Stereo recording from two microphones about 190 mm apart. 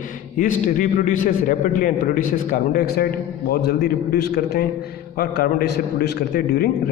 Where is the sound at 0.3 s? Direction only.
45° left (ahead or behind).